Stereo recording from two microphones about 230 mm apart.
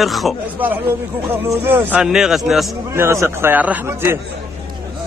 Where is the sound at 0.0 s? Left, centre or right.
Centre.